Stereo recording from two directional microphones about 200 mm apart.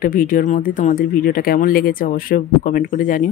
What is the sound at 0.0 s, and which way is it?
Speech, 45° left (ahead or behind).